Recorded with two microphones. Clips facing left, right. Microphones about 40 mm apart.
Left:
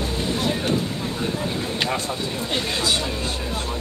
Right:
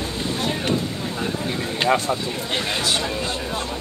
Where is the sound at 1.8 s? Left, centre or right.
Right.